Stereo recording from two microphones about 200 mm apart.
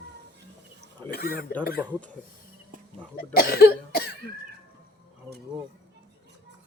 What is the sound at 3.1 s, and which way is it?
Cough, 45° left (ahead or behind).